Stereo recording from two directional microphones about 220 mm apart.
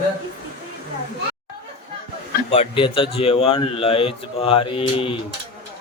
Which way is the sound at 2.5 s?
25° left (ahead or behind).